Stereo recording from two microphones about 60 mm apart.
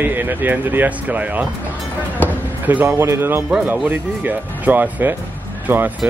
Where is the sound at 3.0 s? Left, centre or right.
Right.